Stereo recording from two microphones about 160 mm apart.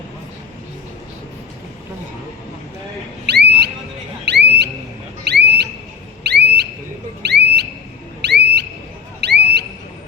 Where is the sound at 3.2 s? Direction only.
90° right.